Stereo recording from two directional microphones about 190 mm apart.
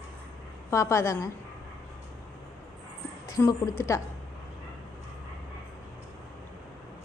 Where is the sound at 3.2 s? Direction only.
15° left (ahead or behind).